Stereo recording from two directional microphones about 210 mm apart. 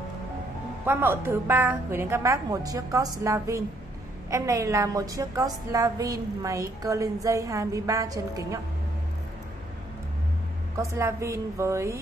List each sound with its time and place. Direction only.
0.8 s a woman's voice: 10° right (ahead or behind)
10.8 s a woman's voice: 15° right (ahead or behind)